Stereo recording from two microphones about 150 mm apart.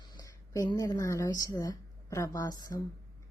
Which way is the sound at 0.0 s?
25° left (ahead or behind).